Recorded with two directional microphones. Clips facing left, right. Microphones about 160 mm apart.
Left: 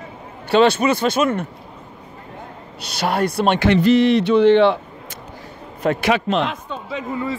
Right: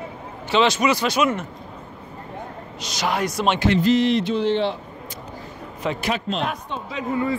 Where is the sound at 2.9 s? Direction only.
55° left (ahead or behind).